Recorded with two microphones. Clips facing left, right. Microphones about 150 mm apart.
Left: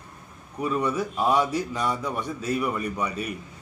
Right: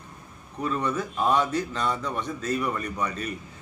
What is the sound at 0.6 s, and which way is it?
Speech, 10° left (ahead or behind).